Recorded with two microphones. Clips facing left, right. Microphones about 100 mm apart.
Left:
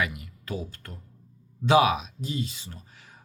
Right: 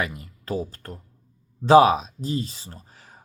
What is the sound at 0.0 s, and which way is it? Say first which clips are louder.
Speech: right 1 dB; 35° right (ahead or behind).